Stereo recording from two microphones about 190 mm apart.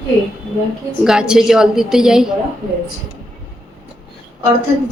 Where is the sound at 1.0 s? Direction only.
5° right (ahead or behind).